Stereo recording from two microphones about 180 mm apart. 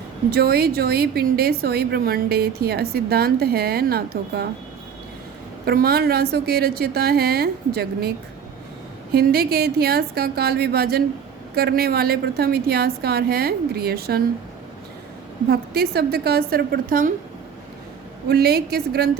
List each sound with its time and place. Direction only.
0.3 s a woman's voice: 60° right (ahead or behind)
5.6 s a woman's voice: 60° right (ahead or behind)
9.1 s a woman's voice: 60° right (ahead or behind)
15.4 s a woman's voice: 60° right (ahead or behind)
18.3 s a woman's voice: 60° right (ahead or behind)